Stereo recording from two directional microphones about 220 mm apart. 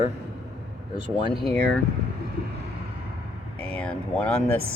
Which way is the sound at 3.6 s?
5° left (ahead or behind).